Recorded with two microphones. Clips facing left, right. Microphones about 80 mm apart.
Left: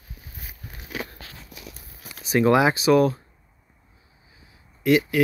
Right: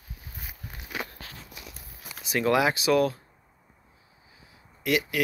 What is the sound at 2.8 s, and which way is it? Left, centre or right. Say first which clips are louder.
Speech: left 5 dB; centre.